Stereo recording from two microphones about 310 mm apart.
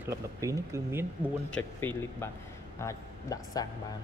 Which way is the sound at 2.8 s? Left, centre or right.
Centre.